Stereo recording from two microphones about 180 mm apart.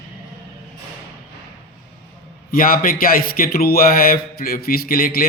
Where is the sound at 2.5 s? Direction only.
50° left (ahead or behind).